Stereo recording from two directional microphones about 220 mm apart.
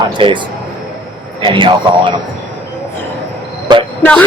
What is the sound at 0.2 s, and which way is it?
Speech, 25° right (ahead or behind).